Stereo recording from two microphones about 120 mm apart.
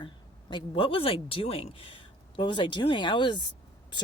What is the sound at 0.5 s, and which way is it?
Speech, 45° left (ahead or behind).